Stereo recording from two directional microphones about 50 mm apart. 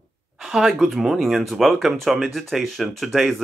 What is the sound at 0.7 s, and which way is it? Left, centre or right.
Speech, centre.